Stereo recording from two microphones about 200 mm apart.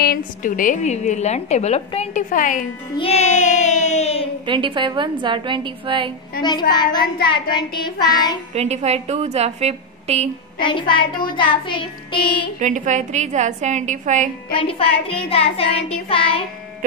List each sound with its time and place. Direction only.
0.0 s a woman's voice: 45° left (ahead or behind)
4.5 s a woman's voice: 25° right (ahead or behind)
6.7 s child singing: 20° left (ahead or behind)
8.5 s a woman's voice: 35° right (ahead or behind)
10.6 s child singing: 25° left (ahead or behind)
12.5 s a woman's voice: 40° right (ahead or behind)
14.5 s child singing: 25° left (ahead or behind)